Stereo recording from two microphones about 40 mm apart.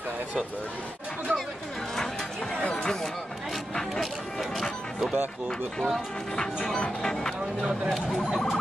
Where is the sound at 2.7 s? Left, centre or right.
Centre.